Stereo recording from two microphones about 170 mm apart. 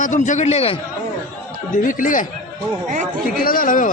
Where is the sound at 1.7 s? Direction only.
50° left (ahead or behind).